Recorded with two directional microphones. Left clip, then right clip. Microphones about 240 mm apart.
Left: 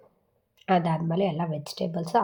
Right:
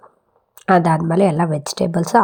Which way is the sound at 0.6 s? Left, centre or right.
Right.